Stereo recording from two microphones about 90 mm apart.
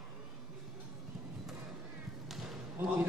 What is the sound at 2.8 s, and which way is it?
Basketball bounce, 20° right (ahead or behind).